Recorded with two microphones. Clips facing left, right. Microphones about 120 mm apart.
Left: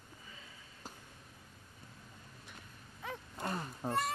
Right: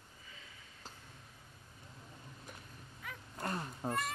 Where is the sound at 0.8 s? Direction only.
10° left (ahead or behind).